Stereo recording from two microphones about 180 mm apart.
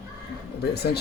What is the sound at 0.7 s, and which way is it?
Speech, 65° left (ahead or behind).